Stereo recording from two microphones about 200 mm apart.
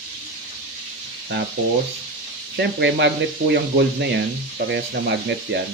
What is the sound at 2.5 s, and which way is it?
Speech, 60° right (ahead or behind).